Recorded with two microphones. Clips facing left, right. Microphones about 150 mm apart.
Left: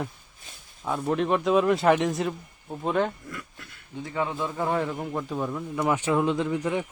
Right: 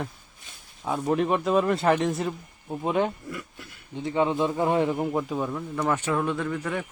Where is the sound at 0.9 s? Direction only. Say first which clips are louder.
Right 1 dB; centre (ahead or behind); by 5.0 s 20° right (ahead or behind).